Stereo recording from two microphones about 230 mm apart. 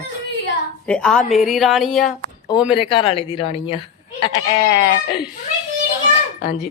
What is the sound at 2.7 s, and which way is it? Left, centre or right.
Speech, left.